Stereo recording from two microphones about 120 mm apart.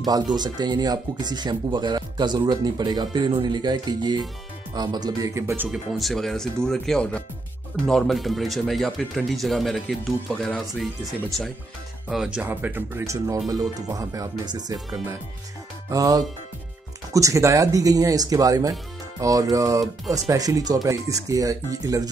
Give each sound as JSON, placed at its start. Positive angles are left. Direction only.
{"t": 0.0, "sound": "speech", "side_deg": -35}
{"t": 5.7, "sound": "speech", "side_deg": 0}